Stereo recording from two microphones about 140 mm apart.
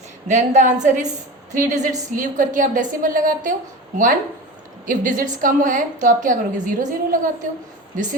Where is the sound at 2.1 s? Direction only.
65° right (ahead or behind).